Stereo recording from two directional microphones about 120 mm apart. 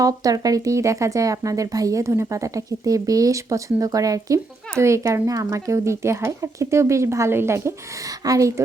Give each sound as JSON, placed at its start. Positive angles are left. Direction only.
{"t": 0.0, "sound": "speech", "side_deg": -30}